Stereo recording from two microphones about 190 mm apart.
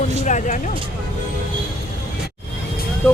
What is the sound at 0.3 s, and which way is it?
Speech, 40° left (ahead or behind).